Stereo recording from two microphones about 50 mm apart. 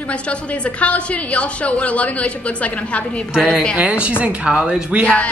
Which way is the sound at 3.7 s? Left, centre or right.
Right.